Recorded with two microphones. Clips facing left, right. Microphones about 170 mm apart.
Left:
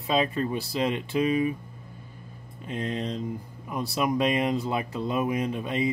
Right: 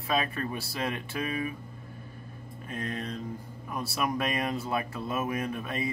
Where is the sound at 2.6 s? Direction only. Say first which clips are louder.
Left 5 dB; 20° left (ahead or behind).